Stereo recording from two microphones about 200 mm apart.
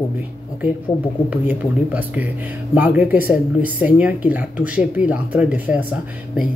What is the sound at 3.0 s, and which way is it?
Speech, 45° left (ahead or behind).